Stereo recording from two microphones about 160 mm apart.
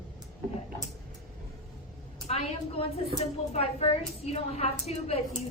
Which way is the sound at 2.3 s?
40° left (ahead or behind).